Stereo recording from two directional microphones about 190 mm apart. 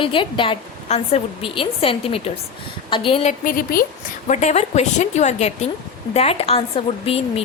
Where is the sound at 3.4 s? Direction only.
50° left (ahead or behind).